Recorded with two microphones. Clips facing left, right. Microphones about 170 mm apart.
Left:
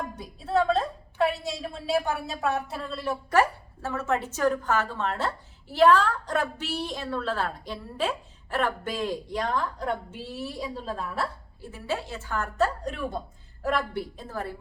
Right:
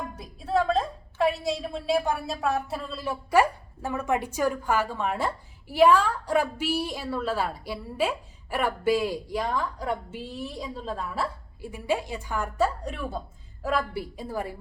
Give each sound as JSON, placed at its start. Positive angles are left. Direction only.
{"t": 0.2, "sound": "a woman's voice", "side_deg": 0}
{"t": 11.6, "sound": "a woman's voice", "side_deg": -15}